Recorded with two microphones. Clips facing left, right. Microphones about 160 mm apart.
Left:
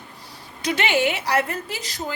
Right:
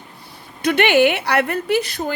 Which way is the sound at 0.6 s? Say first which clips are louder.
Right 7 dB; 60° right (ahead or behind).